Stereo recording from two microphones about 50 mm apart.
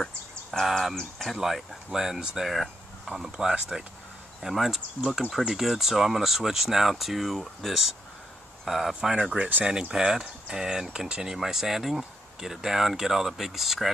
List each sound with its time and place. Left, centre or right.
0.0 s insect: centre
0.9 s speech: centre
1.4 s speech: centre
9.4 s speech: right; by 13.8 s centre